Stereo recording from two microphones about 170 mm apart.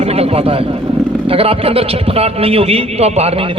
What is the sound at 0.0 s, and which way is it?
Vehicle, 35° right (ahead or behind).